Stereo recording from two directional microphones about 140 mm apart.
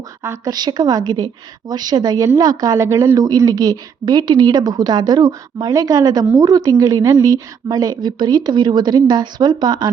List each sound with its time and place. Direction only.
0.2 s speech: 25° right (ahead or behind)